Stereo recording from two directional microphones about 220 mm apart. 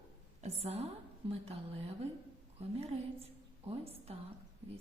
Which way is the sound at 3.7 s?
30° right (ahead or behind).